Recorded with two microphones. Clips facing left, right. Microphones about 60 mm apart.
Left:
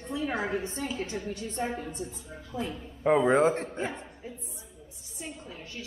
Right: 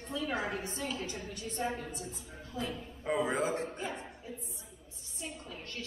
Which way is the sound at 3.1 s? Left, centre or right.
Left.